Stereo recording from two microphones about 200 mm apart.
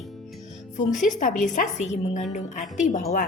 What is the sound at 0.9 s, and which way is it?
Speech, centre (ahead or behind).